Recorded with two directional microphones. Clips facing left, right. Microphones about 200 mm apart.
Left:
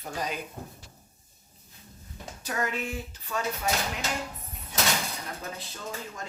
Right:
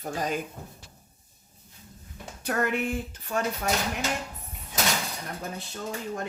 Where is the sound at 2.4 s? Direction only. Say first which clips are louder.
Right 5 dB; 60° right (ahead or behind).